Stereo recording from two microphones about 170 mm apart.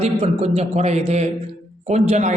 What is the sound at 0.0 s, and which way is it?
Speech, 35° right (ahead or behind).